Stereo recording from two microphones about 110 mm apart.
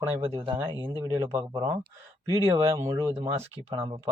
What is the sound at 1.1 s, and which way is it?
A man's voice, 25° right (ahead or behind).